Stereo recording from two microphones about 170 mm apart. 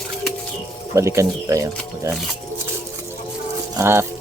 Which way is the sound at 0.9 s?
20° right (ahead or behind).